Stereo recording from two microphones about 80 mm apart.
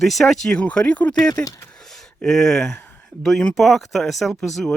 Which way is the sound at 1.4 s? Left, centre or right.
Left.